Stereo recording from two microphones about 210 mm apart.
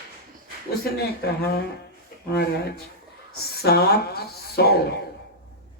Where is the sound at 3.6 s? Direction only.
50° left (ahead or behind).